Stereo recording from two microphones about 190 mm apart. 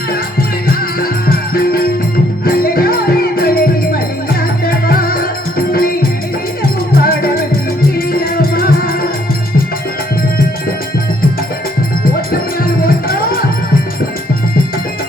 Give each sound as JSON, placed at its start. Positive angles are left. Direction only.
{"t": 0.7, "sound": "music", "side_deg": 50}
{"t": 12.8, "sound": "music", "side_deg": 50}